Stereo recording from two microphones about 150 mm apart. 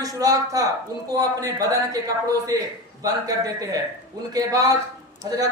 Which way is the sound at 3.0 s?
25° right (ahead or behind).